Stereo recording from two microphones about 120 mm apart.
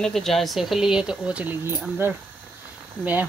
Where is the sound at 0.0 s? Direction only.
5° left (ahead or behind).